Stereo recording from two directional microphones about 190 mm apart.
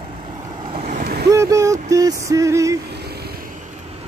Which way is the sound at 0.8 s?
50° right (ahead or behind).